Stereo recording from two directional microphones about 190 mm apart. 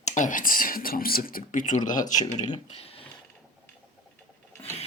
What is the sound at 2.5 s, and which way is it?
Speech, 30° left (ahead or behind).